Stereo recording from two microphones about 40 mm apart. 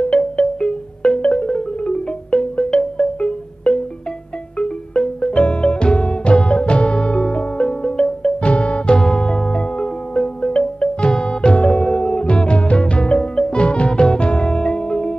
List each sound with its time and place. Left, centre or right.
0.0 s music: left
1.4 s marimba: centre
1.8 s marimba: left
4.6 s music: left
8.4 s music: left